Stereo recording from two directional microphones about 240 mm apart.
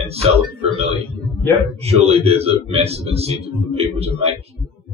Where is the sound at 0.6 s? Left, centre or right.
Right.